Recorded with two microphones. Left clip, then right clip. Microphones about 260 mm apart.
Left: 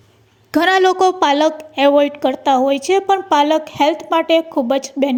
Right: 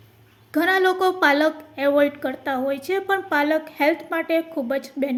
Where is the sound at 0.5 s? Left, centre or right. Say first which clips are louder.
Left 6 dB; left.